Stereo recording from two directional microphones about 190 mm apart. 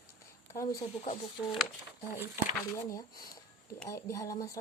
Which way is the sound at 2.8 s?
15° left (ahead or behind).